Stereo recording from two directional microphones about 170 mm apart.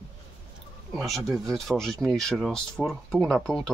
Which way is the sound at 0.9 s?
Centre (ahead or behind).